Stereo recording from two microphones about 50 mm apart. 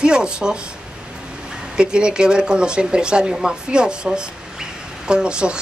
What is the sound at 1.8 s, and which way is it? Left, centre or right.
Speech, centre.